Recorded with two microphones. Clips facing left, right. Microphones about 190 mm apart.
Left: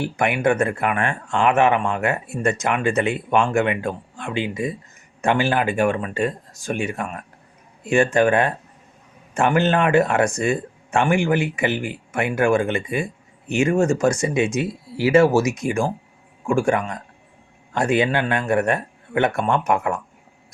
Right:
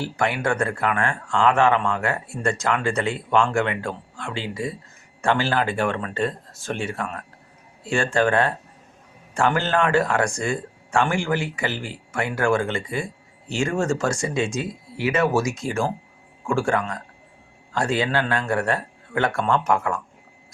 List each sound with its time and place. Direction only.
0.0 s speech: 20° left (ahead or behind)